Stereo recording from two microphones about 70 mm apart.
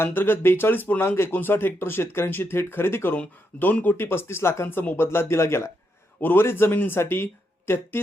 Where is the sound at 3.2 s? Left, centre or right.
Left.